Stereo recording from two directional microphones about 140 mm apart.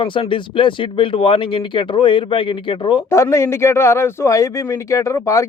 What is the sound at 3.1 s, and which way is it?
A man's voice, 20° left (ahead or behind).